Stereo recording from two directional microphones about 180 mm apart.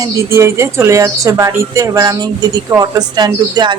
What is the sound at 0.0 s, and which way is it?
A woman's voice, 15° right (ahead or behind).